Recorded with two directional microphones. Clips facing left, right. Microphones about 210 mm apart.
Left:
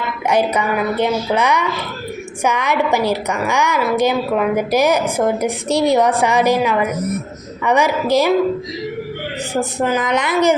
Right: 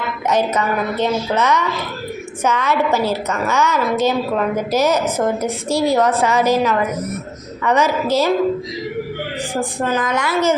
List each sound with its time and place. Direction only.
0.3 s a woman's voice: 10° left (ahead or behind)
9.6 s a woman's voice: 20° left (ahead or behind)